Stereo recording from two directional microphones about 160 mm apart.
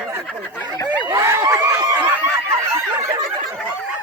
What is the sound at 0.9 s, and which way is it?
Snicker, 25° right (ahead or behind).